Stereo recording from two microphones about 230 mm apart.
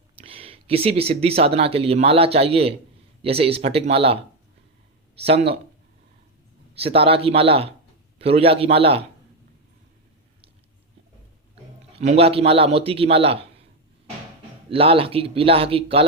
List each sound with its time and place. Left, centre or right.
0.2 s a man's voice: right
5.2 s a man's voice: right
6.7 s a man's voice: right
11.9 s a man's voice: right
14.7 s a man's voice: right